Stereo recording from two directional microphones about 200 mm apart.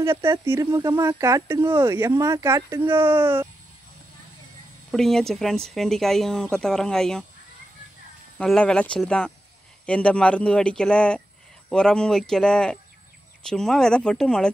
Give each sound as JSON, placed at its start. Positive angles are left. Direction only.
{"t": 0.0, "sound": "speech", "side_deg": -15}
{"t": 4.9, "sound": "speech", "side_deg": 0}
{"t": 8.4, "sound": "speech", "side_deg": 5}